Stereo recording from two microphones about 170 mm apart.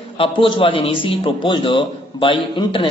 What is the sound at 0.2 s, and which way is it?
A man's voice, 30° left (ahead or behind).